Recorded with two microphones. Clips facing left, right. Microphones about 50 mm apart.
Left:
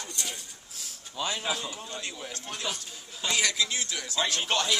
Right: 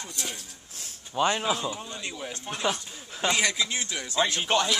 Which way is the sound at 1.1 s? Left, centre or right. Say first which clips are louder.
Right 8 dB; right.